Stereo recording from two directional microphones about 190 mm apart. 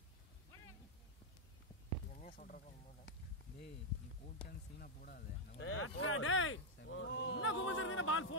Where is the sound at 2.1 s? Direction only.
45° left (ahead or behind).